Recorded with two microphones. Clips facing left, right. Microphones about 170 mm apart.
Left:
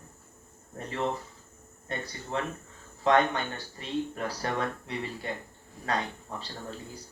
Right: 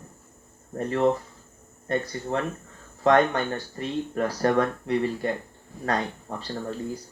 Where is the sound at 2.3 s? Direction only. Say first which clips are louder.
Right 3 dB; 50° right (ahead or behind).